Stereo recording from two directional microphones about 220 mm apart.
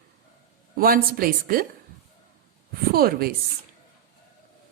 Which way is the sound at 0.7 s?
40° right (ahead or behind).